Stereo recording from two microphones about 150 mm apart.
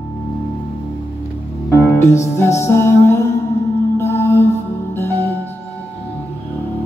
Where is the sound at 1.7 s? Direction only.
20° left (ahead or behind).